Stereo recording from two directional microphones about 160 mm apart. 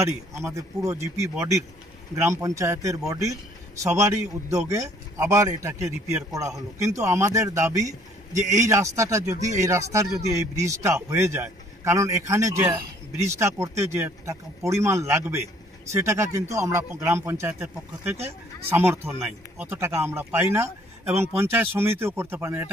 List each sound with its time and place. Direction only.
0.0 s a man's voice: 20° right (ahead or behind)